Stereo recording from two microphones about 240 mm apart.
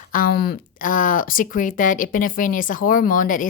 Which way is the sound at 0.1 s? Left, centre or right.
Left.